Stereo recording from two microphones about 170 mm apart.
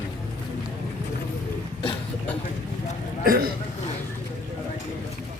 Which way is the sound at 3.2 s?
60° right (ahead or behind).